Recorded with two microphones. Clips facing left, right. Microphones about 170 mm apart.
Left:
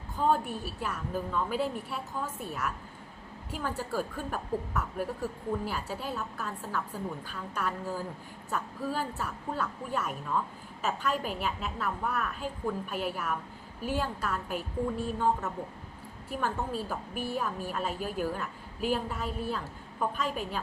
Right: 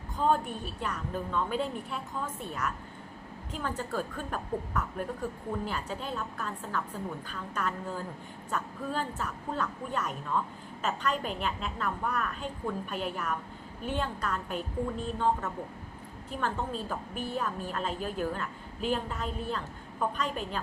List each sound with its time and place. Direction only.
0.2 s a woman's voice: 5° left (ahead or behind)